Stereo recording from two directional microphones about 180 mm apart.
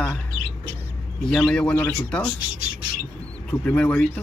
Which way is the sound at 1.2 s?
5° left (ahead or behind).